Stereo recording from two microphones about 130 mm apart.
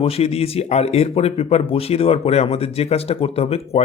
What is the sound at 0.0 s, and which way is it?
Speech, 50° left (ahead or behind).